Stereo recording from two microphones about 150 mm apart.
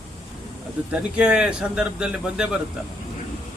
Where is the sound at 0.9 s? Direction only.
5° right (ahead or behind).